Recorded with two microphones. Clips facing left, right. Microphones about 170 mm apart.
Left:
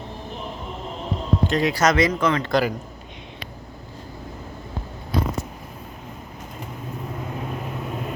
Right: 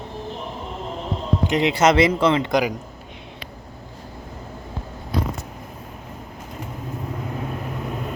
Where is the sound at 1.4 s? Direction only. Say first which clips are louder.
Right 3 dB; 20° right (ahead or behind).